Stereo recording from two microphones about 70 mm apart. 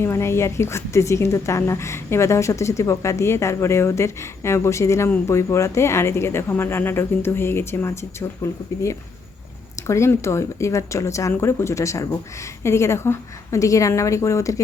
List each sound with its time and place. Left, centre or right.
0.0 s a woman's voice: left